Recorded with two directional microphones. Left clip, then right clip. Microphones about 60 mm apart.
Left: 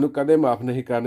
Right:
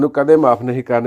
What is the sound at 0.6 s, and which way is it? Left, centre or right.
Speech, right.